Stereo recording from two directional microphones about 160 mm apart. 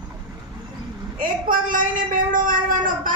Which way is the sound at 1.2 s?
60° right (ahead or behind).